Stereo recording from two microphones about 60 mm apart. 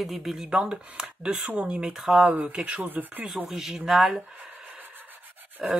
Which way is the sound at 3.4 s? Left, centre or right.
Centre.